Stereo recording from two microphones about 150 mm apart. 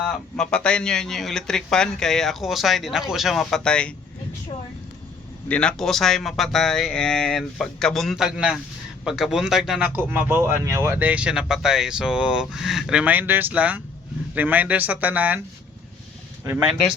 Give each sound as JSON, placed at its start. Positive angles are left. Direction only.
{"t": 0.1, "sound": "speech", "side_deg": 5}
{"t": 5.5, "sound": "speech", "side_deg": 5}